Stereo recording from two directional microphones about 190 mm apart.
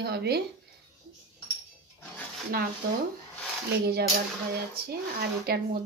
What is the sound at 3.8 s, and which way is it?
Speech, 55° right (ahead or behind).